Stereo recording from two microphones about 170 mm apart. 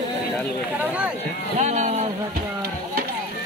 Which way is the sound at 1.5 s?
45° right (ahead or behind).